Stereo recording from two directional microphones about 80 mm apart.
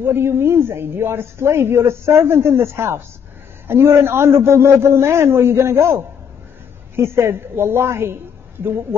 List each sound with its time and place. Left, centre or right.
0.0 s a woman's voice: right
7.0 s a woman's voice: right